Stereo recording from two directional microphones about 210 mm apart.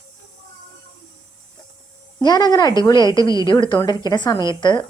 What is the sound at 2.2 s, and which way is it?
A woman's voice, 20° left (ahead or behind).